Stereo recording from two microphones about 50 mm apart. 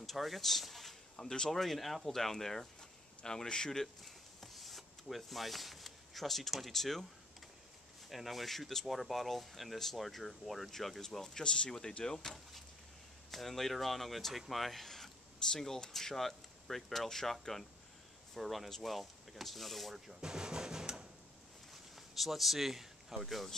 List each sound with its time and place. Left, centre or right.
0.0 s speech: centre
1.1 s speech: centre
1.5 s speech: centre
3.8 s rub: centre
6.5 s speech: centre
8.1 s speech: centre
20.2 s music: centre
21.9 s speech: centre